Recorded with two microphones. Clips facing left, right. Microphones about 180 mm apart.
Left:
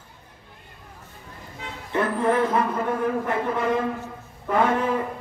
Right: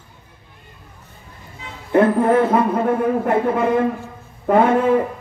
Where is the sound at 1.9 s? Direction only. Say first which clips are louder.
Right 8 dB; 55° right (ahead or behind).